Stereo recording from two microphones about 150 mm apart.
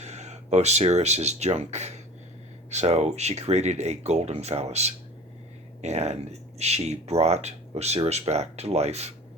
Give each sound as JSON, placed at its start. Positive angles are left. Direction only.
{"t": 0.0, "sound": "speech", "side_deg": -50}